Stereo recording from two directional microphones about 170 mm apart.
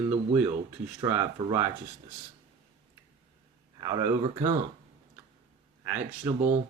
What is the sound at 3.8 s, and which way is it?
Speech, 20° right (ahead or behind).